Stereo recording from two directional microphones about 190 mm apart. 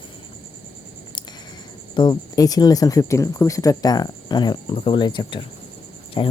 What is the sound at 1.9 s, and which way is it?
Speech, 25° left (ahead or behind).